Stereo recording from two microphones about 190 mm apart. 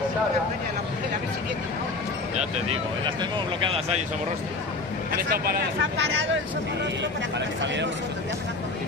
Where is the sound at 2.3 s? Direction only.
35° right (ahead or behind).